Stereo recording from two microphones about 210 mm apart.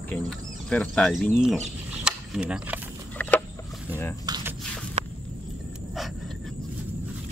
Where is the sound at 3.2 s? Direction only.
10° left (ahead or behind).